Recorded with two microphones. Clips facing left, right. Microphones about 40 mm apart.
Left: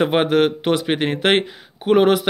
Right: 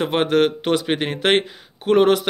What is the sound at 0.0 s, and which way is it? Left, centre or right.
Speech, centre.